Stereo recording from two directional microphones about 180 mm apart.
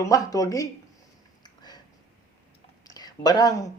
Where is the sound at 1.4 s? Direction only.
20° left (ahead or behind).